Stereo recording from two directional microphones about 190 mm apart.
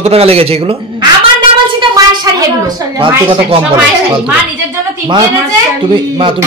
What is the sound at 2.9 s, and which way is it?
Speech, 25° right (ahead or behind).